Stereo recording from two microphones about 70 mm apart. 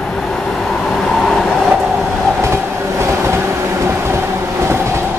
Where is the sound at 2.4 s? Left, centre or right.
Right.